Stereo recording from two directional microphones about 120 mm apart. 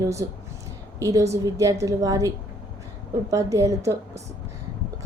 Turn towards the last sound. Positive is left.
turn(degrees=-25)  # may be behind; listen again after turning